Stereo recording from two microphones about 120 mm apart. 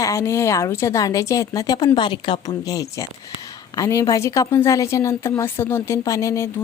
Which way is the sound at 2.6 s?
30° left (ahead or behind).